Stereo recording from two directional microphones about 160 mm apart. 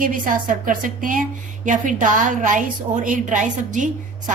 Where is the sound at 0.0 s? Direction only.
55° right (ahead or behind).